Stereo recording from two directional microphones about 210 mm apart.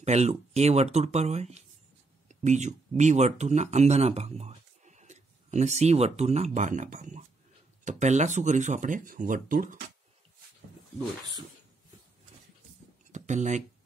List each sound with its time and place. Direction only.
0.0 s speech: 30° right (ahead or behind)
13.1 s speech: 35° right (ahead or behind)